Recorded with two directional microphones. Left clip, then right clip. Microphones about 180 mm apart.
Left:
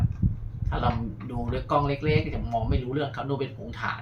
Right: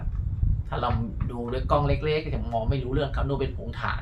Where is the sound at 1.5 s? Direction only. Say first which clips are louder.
Right 1 dB; 25° right (ahead or behind).